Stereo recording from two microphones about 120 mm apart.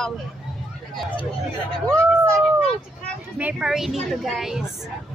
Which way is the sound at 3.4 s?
10° right (ahead or behind).